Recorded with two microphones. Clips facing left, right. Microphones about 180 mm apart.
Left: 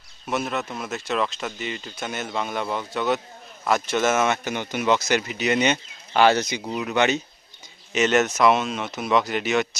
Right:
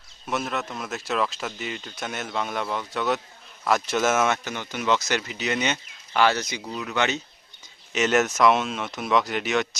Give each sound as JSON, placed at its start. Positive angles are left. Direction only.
{"t": 0.3, "sound": "speech", "side_deg": 0}
{"t": 4.4, "sound": "speech", "side_deg": 20}
{"t": 7.9, "sound": "speech", "side_deg": 0}